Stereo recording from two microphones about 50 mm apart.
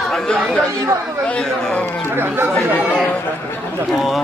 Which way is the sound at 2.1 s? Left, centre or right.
Right.